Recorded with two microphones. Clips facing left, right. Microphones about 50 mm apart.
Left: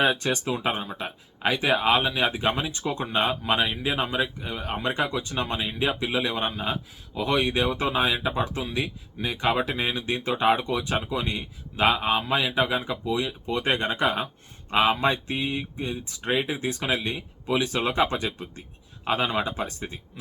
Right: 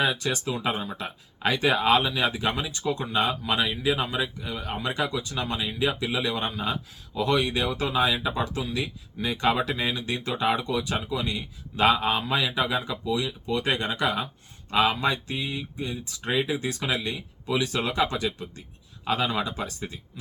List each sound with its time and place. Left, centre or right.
0.0 s speech: left
9.1 s speech: centre
11.8 s speech: centre